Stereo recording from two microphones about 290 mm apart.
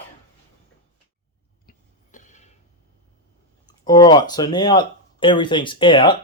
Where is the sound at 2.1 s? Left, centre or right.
Left.